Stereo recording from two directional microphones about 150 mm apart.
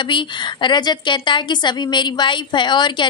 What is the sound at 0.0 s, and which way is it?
A woman's voice, 30° left (ahead or behind).